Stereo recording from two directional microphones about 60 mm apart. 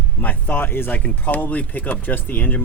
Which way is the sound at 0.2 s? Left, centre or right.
Left.